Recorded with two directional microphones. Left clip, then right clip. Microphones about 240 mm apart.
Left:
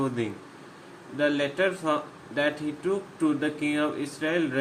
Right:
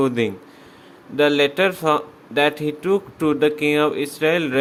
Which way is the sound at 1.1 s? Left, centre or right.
Right.